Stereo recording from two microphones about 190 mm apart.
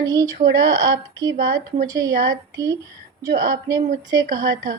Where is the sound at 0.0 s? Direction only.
20° right (ahead or behind).